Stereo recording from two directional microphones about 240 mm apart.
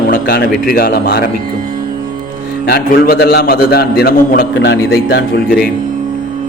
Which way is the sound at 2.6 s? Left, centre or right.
Left.